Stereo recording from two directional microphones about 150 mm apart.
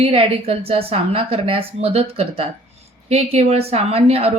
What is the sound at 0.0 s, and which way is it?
A woman's voice, 40° right (ahead or behind).